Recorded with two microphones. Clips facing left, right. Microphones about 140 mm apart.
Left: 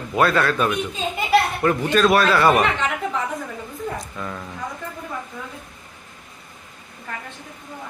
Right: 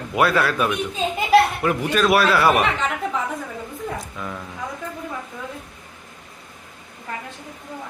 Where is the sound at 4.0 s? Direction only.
5° right (ahead or behind).